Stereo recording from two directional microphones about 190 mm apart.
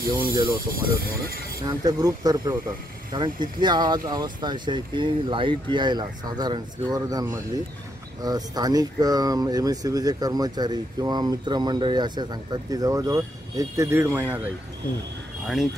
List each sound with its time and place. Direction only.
0.0 s speech: 50° right (ahead or behind)
1.7 s speech: 20° right (ahead or behind); by 15.7 s centre (ahead or behind)